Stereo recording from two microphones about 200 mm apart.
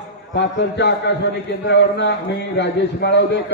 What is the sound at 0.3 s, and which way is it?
A man's voice, 60° left (ahead or behind).